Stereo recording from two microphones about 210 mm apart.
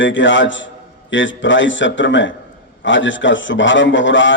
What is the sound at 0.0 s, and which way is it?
A man's voice, 60° left (ahead or behind).